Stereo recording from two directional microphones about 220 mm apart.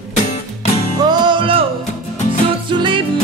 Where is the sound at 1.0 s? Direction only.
20° right (ahead or behind).